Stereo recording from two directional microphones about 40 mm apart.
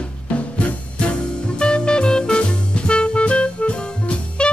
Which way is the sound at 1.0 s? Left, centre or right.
Left.